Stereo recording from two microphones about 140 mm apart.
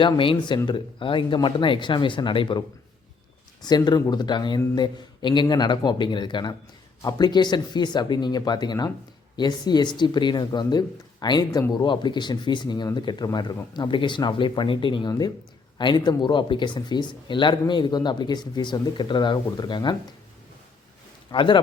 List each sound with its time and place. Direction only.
0.0 s speech: 35° left (ahead or behind)
21.3 s speech: 35° left (ahead or behind)